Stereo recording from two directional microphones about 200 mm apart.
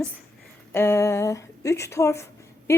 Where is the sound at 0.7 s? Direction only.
10° left (ahead or behind).